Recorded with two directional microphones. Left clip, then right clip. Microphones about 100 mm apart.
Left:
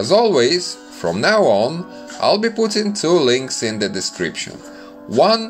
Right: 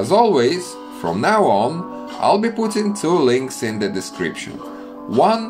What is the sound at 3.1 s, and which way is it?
Speech, 30° left (ahead or behind).